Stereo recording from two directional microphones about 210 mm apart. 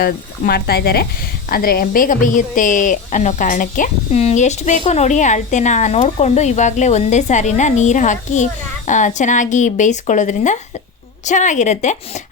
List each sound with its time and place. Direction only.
0.0 s a woman's voice: 45° left (ahead or behind)